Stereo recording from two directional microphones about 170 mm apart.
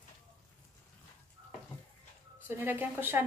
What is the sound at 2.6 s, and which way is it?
Speech, 10° right (ahead or behind).